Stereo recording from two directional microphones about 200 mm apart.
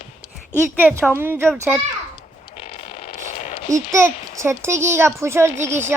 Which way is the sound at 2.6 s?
30° left (ahead or behind).